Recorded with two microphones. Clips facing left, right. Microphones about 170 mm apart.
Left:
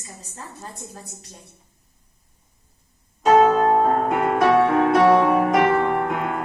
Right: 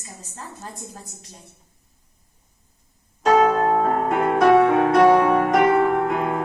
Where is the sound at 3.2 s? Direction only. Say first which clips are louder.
Left 2 dB; centre (ahead or behind).